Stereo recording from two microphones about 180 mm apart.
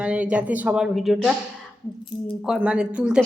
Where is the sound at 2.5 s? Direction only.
5° right (ahead or behind).